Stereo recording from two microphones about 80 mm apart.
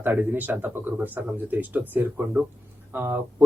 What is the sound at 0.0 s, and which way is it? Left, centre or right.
Speech, right.